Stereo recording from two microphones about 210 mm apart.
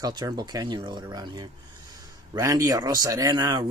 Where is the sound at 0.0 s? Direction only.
20° right (ahead or behind).